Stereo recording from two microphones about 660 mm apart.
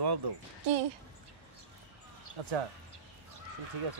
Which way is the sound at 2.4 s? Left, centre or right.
Right.